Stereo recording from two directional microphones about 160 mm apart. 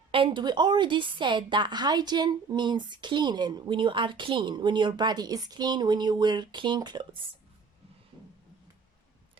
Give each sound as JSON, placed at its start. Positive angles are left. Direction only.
{"t": 0.1, "sound": "a woman's voice", "side_deg": -35}